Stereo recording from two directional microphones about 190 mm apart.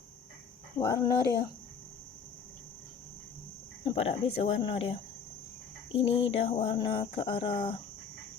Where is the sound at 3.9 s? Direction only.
30° left (ahead or behind).